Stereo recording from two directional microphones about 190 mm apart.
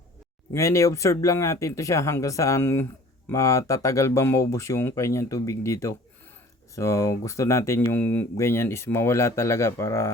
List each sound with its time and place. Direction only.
0.5 s speech: 15° left (ahead or behind)